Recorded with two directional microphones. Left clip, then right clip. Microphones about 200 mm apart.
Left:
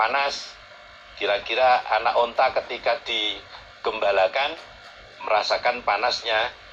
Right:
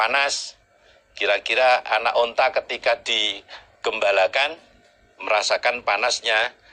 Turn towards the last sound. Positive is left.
turn(degrees=-35)  # may be behind; listen again after turning